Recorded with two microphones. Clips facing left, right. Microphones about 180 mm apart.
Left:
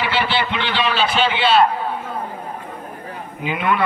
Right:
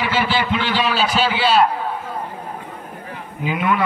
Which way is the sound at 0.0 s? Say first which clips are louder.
Right 1 dB; 10° right (ahead or behind).